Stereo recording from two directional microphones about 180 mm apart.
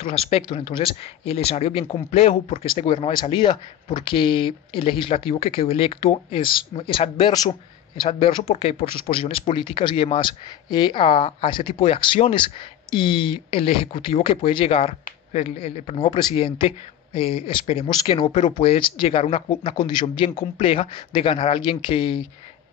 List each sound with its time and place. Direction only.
0.0 s speech: 30° left (ahead or behind)